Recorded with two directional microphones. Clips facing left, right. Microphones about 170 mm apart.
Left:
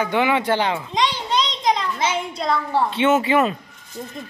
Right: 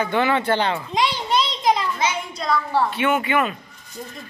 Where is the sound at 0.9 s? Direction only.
10° right (ahead or behind).